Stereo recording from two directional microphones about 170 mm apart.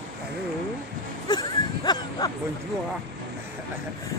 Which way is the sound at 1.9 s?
25° left (ahead or behind).